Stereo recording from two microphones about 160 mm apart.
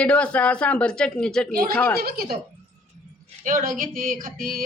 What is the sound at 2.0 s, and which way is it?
Speech, 70° right (ahead or behind).